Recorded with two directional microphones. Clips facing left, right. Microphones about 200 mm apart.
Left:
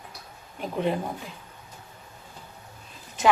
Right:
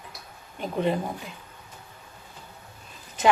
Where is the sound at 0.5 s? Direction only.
Centre (ahead or behind).